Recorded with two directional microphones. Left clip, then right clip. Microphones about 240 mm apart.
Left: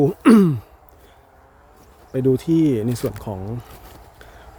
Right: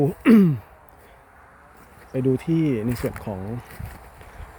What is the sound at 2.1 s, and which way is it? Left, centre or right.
Speech, centre.